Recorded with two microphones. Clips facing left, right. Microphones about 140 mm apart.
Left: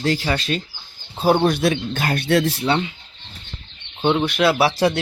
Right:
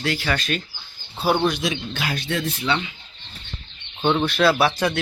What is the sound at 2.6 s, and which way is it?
Speech, 40° left (ahead or behind).